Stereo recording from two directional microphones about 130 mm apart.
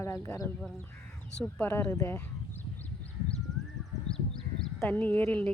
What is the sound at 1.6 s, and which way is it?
Speech, 10° left (ahead or behind).